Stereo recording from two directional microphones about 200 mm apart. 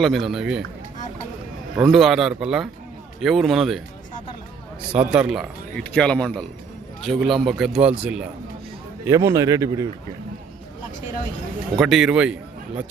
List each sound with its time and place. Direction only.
0.0 s a man's voice: centre (ahead or behind)
1.9 s a man's voice: centre (ahead or behind)
4.9 s a man's voice: 5° right (ahead or behind)
11.8 s a man's voice: centre (ahead or behind)